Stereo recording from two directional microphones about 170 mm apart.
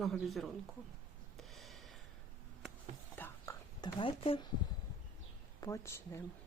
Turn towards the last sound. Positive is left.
turn(degrees=15)  # may be behind; listen again after turning